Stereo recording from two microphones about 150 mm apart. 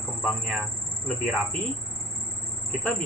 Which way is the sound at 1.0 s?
5° left (ahead or behind).